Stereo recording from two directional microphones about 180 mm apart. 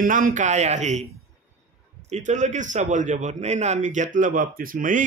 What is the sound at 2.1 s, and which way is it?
Speech, 40° right (ahead or behind).